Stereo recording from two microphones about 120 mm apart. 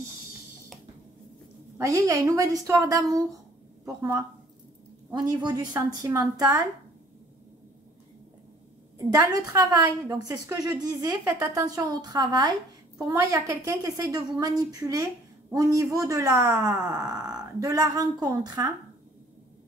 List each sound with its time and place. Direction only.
1.8 s a woman's voice: 25° right (ahead or behind)
5.1 s speech: 35° right (ahead or behind)
5.7 s a woman's voice: 25° right (ahead or behind)
8.9 s a woman's voice: 25° right (ahead or behind)